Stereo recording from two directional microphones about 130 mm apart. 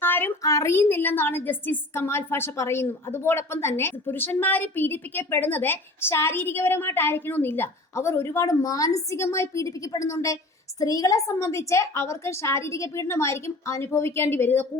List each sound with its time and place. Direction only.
0.0 s a woman's voice: 15° left (ahead or behind)